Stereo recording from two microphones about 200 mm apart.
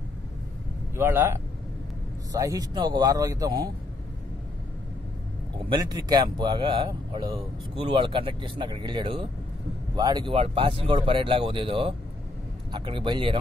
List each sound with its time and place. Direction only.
0.9 s a man's voice: 10° right (ahead or behind)
5.7 s speech: 20° right (ahead or behind)